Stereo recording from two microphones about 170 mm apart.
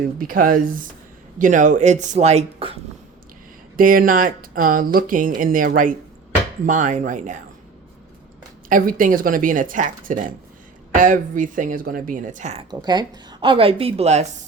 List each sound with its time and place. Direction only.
0.2 s speech: 55° right (ahead or behind); by 2.7 s 35° right (ahead or behind)
3.8 s speech: 55° right (ahead or behind)
8.7 s speech: 55° right (ahead or behind)
12.8 s speech: 25° right (ahead or behind)